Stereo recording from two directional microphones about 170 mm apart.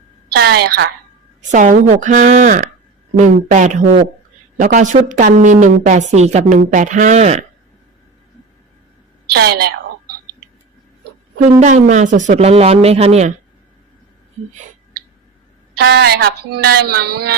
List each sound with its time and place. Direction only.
0.3 s speech: 70° right (ahead or behind)
1.5 s a woman's voice: 45° right (ahead or behind)
9.3 s a woman's voice: 65° right (ahead or behind)
11.4 s speech: 45° right (ahead or behind)
15.8 s speech: 80° right